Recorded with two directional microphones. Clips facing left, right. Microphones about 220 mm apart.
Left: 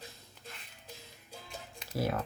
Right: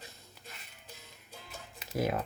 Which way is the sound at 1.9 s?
20° right (ahead or behind).